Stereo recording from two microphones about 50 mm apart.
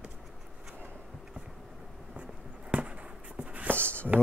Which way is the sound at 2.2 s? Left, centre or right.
Right.